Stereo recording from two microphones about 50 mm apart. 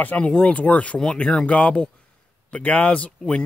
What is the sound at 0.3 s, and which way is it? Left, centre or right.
Speech, centre.